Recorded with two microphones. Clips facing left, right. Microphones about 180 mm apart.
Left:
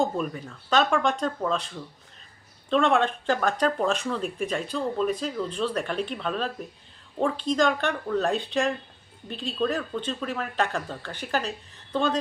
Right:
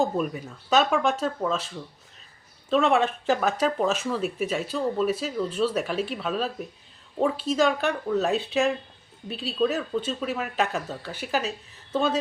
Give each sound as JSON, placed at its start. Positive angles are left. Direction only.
{"t": 0.0, "sound": "speech", "side_deg": -5}